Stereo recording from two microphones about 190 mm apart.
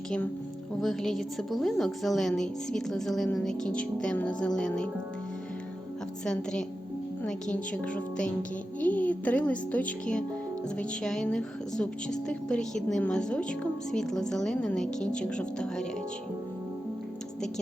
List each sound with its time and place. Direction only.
0.8 s a woman's voice: centre (ahead or behind)
6.2 s a woman's voice: 5° left (ahead or behind)